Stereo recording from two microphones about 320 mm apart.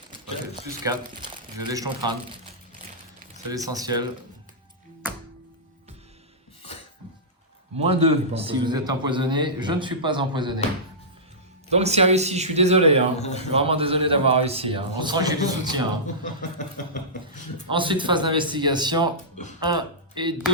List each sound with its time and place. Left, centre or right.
0.1 s speech: centre
3.5 s a man's voice: centre
7.8 s a man's voice: centre
11.7 s a man's voice: centre
13.1 s speech: left
13.5 s a man's voice: centre
16.2 s speech: left
17.7 s a man's voice: centre